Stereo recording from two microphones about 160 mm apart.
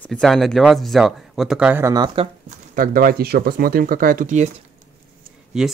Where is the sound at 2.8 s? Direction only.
65° right (ahead or behind).